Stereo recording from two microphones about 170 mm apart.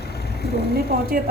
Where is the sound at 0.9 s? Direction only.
60° right (ahead or behind).